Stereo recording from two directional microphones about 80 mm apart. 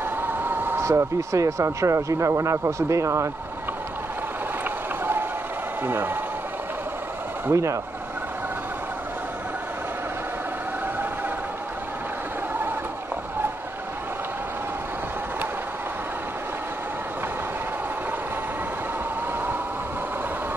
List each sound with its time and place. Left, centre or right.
0.5 s vehicle: right
0.8 s speech: right
4.6 s a sound: right
5.9 s speech: right
7.5 s speech: right